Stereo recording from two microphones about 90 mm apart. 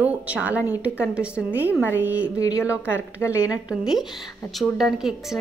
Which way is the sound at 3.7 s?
5° right (ahead or behind).